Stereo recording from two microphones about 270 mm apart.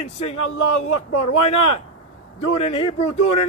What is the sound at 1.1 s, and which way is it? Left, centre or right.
Speech, left.